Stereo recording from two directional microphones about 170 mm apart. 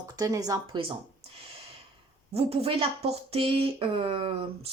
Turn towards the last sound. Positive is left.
turn(degrees=-35)  # may be behind; listen again after turning